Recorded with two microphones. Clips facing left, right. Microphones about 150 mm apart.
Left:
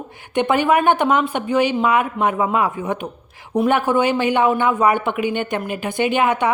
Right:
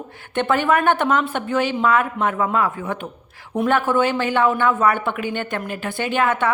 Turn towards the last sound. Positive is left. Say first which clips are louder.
# left 2 dB
turn(degrees=15)  # may be behind; listen again after turning